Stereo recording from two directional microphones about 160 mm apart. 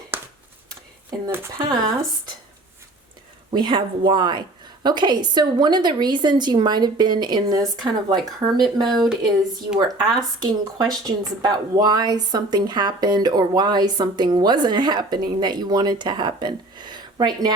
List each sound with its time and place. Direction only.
1.3 s speech: 15° right (ahead or behind)
3.5 s speech: 30° right (ahead or behind)